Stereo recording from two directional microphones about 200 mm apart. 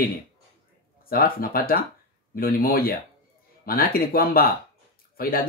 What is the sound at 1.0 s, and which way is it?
Speech, 45° left (ahead or behind).